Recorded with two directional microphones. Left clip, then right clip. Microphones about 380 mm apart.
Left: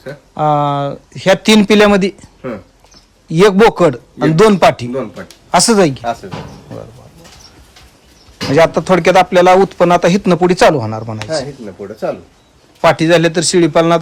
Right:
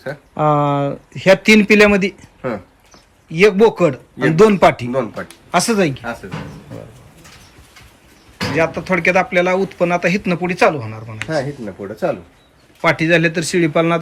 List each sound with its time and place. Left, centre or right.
0.0 s speech: centre
3.2 s speech: centre
4.9 s speech: centre
5.5 s speech: centre
8.6 s speech: centre
11.3 s speech: right
12.8 s speech: centre